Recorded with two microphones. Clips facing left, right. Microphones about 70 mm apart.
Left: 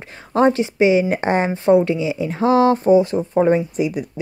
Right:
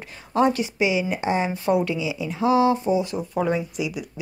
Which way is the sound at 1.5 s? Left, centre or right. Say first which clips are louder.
Left 7 dB; left.